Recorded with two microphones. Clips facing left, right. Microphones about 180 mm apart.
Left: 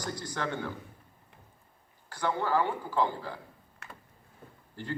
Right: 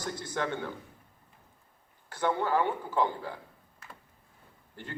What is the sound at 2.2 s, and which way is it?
A man's voice, 20° right (ahead or behind).